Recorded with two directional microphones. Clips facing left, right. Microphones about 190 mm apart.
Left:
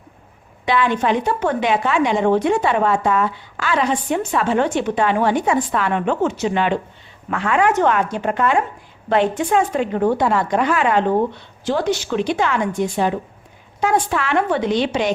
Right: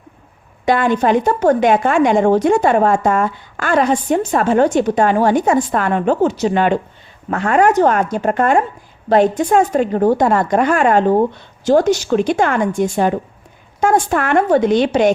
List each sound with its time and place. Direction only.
0.6 s a woman's voice: 45° right (ahead or behind)